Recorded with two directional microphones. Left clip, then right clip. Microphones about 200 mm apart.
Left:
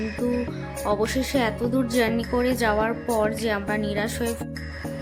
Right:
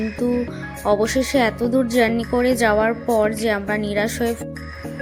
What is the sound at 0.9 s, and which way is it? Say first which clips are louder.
Speech: right 6 dB; 15° right (ahead or behind).